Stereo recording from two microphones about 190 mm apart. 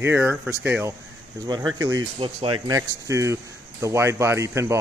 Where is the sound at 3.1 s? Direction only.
15° right (ahead or behind).